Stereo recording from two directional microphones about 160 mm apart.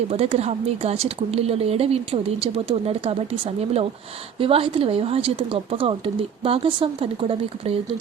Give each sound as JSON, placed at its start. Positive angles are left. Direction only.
{"t": 0.1, "sound": "speech", "side_deg": -40}